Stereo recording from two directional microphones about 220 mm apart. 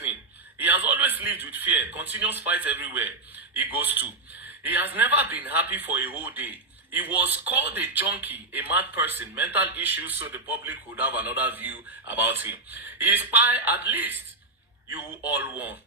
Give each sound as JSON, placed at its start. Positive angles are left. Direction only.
{"t": 0.6, "sound": "a man's voice", "side_deg": -10}